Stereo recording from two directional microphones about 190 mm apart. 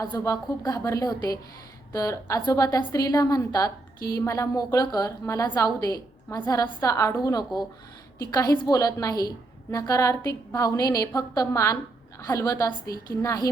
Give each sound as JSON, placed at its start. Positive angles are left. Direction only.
{"t": 0.0, "sound": "a woman's voice", "side_deg": 20}